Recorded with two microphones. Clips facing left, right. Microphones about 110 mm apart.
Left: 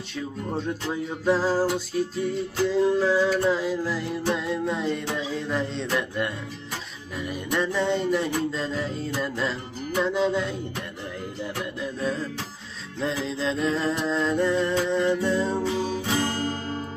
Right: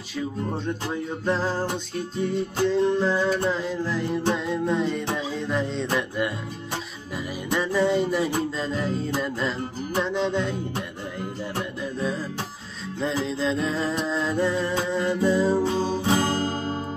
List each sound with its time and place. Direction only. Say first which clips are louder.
0.1 s music: right 2 dB; centre (ahead or behind)
11.8 s music: left 1 dB; centre (ahead or behind)
15.6 s music: right 3 dB; 35° right (ahead or behind)